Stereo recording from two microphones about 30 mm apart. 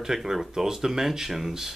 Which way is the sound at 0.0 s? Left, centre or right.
Centre.